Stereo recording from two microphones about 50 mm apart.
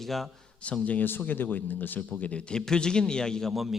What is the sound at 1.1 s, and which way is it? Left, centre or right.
Speech, left.